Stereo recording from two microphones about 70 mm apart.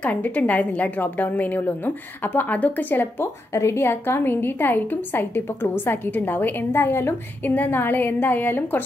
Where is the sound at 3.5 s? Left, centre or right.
Left.